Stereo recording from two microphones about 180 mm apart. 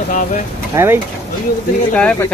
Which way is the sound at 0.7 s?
10° right (ahead or behind).